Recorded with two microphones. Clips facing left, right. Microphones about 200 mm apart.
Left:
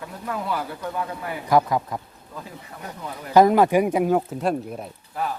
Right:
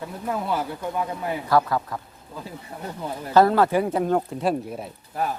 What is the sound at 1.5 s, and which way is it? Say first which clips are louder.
Speech: left 2 dB; 15° left (ahead or behind).